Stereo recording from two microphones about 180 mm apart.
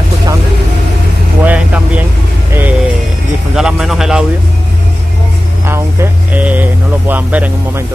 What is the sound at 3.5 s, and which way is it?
Speech, centre (ahead or behind).